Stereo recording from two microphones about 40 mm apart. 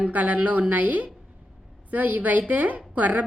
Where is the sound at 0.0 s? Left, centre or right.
Right.